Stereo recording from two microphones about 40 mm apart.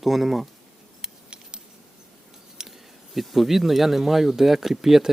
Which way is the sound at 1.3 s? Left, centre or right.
Right.